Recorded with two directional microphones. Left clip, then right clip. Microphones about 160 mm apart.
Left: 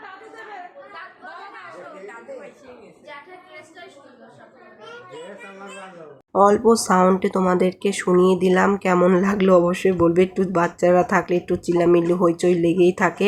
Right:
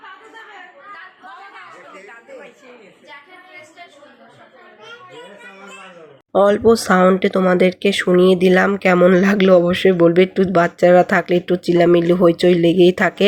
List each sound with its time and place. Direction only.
6.8 s speech: 10° right (ahead or behind)